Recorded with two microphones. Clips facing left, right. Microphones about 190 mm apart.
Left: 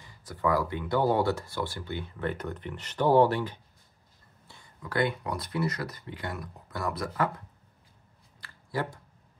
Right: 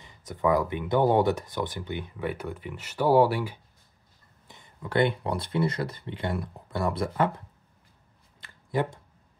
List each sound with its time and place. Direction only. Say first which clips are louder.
0.0 s speech: right 3 dB; 20° right (ahead or behind)
4.5 s speech: right 4 dB; 20° right (ahead or behind)
8.4 s a sound: right 5 dB; 20° right (ahead or behind)